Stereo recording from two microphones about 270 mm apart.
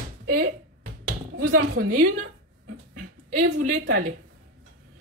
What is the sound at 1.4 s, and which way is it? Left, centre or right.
Speech, right.